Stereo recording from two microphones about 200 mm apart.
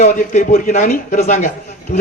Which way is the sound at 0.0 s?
40° left (ahead or behind).